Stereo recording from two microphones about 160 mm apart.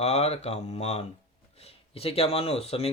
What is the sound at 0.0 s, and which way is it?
Speech, 40° left (ahead or behind).